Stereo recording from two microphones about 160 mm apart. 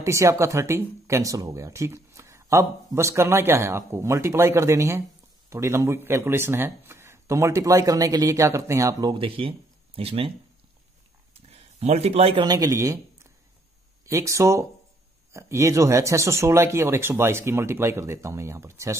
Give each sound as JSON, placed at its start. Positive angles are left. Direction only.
{"t": 0.0, "sound": "speech", "side_deg": -20}
{"t": 9.2, "sound": "speech", "side_deg": -35}
{"t": 11.8, "sound": "a man's voice", "side_deg": -40}